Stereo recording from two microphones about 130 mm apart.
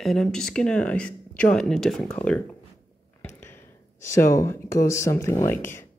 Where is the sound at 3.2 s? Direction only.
15° left (ahead or behind).